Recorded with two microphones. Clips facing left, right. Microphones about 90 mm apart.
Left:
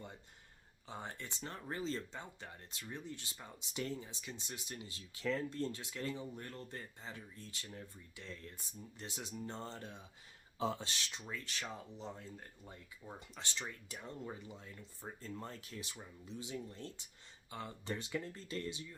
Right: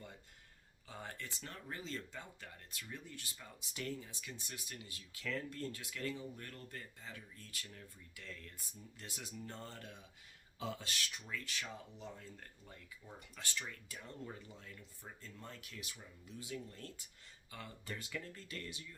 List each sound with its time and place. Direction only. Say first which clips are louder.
0.9 s speech: left 2 dB; 25° left (ahead or behind)